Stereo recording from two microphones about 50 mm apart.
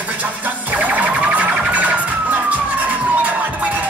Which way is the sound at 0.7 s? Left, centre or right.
Right.